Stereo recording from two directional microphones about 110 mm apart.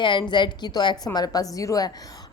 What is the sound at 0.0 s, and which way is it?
A woman's voice, 45° left (ahead or behind).